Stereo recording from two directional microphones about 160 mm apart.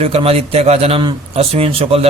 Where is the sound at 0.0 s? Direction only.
40° right (ahead or behind).